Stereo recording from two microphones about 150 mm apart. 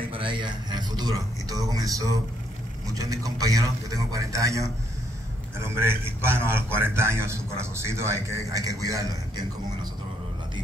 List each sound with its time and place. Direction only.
0.1 s a man's voice: 35° right (ahead or behind)